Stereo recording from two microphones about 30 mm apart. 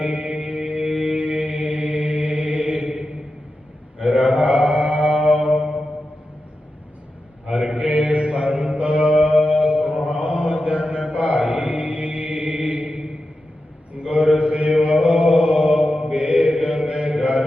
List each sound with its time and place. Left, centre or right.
0.0 s music: right
0.5 s music: right
0.9 s music: centre
1.1 s mantra: right
2.9 s a sound: right
3.9 s mantra: right
5.4 s music: centre
7.8 s mantra: right
9.2 s music: right
9.8 s mantra: right
10.1 s mantra: right
12.9 s a sound: right
14.0 s mantra: right
14.7 s mantra: right